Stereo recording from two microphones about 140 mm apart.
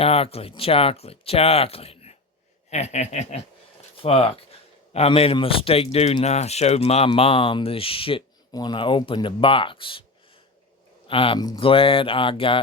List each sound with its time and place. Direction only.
0.0 s speech: 45° left (ahead or behind)
11.1 s speech: 40° left (ahead or behind)